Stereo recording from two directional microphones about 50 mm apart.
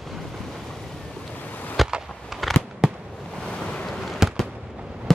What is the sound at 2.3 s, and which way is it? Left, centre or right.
Fireworks, centre.